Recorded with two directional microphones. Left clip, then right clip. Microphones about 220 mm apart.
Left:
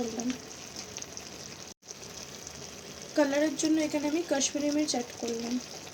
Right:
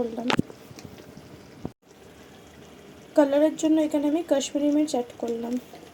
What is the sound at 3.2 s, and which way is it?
Speech, 15° right (ahead or behind).